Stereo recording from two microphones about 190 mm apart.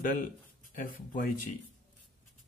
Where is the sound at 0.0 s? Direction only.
45° left (ahead or behind).